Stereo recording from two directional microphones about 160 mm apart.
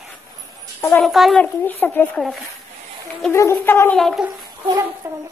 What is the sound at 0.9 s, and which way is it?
Speech, centre (ahead or behind).